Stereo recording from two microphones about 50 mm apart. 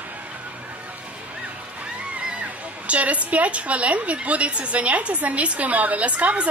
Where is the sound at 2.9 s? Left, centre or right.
Right.